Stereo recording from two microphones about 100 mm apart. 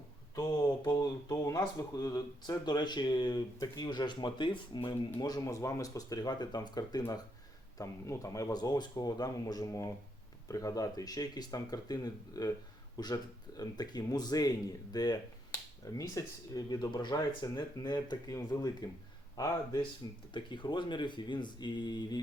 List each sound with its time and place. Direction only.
0.9 s a sound: 35° left (ahead or behind)
1.5 s speech: 35° left (ahead or behind); by 4.9 s 55° left (ahead or behind)
5.2 s speech: 40° left (ahead or behind)
7.8 s speech: 30° left (ahead or behind)
18.3 s speech: 35° left (ahead or behind)
20.3 s speech: 55° left (ahead or behind)